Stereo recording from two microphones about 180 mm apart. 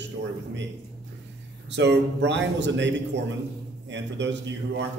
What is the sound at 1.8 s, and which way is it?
A man's voice, 75° right (ahead or behind).